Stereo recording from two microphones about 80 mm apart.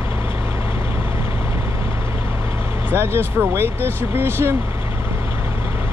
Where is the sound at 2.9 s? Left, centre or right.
Right.